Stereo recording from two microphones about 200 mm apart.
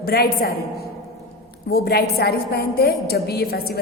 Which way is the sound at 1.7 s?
50° left (ahead or behind).